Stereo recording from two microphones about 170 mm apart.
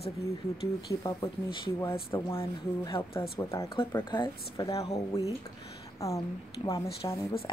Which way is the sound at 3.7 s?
30° left (ahead or behind).